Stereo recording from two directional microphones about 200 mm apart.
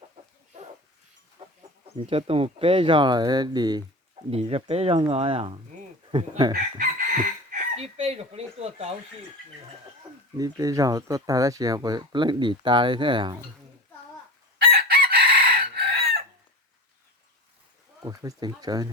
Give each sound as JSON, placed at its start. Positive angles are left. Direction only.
{"t": 1.4, "sound": "chicken", "side_deg": -25}
{"t": 2.0, "sound": "speech", "side_deg": -30}
{"t": 6.5, "sound": "chicken", "side_deg": -45}
{"t": 7.8, "sound": "a sound", "side_deg": -30}
{"t": 10.3, "sound": "speech", "side_deg": -20}
{"t": 14.6, "sound": "chicken", "side_deg": -50}
{"t": 18.0, "sound": "speech", "side_deg": -15}